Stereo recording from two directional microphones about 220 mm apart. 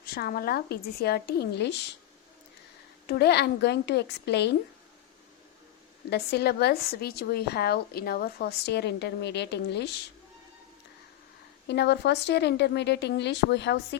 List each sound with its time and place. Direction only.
0.0 s a woman's voice: 45° left (ahead or behind)
3.1 s a woman's voice: 50° left (ahead or behind)
6.1 s a woman's voice: 50° left (ahead or behind)
11.7 s a woman's voice: 50° left (ahead or behind)